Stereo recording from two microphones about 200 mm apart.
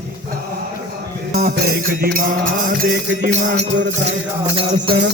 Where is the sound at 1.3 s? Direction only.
50° right (ahead or behind).